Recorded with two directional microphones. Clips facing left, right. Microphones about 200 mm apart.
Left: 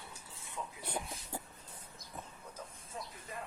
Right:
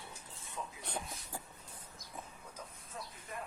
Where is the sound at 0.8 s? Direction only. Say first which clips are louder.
Left 4 dB; 10° left (ahead or behind).